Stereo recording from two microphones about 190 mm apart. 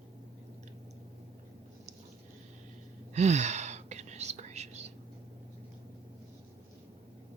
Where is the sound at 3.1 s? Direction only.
35° right (ahead or behind).